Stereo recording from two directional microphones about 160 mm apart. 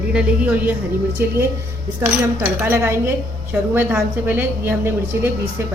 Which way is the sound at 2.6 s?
10° right (ahead or behind).